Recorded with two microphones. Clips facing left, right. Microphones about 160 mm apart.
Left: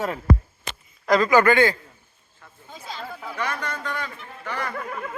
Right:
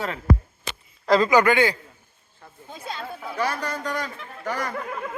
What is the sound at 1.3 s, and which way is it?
Speech, 15° right (ahead or behind).